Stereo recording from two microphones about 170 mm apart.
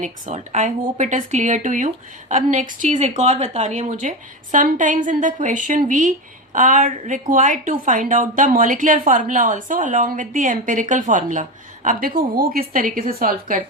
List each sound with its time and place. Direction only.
0.0 s a woman's voice: 45° right (ahead or behind)